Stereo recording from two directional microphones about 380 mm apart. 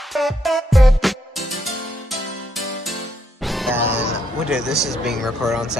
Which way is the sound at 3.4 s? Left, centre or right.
Centre.